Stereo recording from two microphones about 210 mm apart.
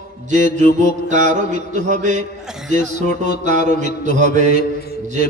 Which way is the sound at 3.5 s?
45° left (ahead or behind).